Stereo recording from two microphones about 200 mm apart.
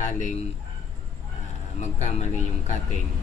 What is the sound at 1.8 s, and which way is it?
Speech, 35° left (ahead or behind).